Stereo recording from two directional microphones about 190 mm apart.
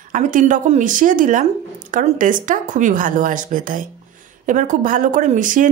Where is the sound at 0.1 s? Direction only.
40° right (ahead or behind).